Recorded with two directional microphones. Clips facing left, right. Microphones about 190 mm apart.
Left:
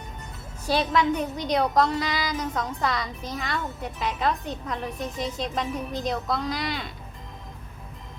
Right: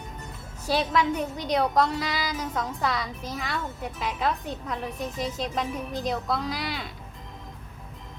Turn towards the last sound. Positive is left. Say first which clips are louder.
# left 2 dB
turn(degrees=0)  # may be behind; listen again after turning